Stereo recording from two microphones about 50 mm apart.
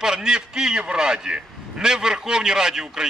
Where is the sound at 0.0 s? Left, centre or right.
Centre.